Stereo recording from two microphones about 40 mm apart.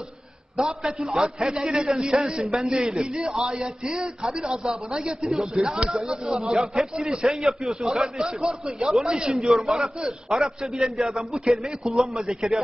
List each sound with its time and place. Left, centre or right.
0.6 s a man's voice: centre
9.4 s a man's voice: centre